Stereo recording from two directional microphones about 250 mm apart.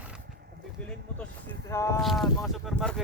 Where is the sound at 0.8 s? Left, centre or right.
Centre.